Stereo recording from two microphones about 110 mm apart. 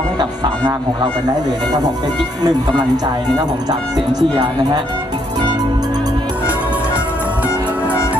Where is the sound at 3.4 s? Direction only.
35° right (ahead or behind).